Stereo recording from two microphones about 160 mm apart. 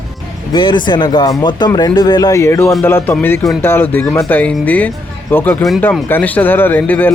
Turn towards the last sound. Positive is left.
turn(degrees=10)  # may be behind; listen again after turning